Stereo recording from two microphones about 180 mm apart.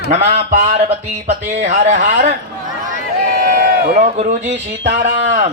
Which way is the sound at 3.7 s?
50° right (ahead or behind).